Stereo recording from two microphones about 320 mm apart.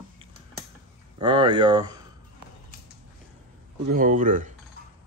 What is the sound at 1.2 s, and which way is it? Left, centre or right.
Speech, centre.